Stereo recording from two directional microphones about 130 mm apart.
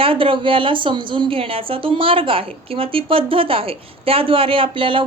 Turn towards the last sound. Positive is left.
turn(degrees=-40)  # may be behind; listen again after turning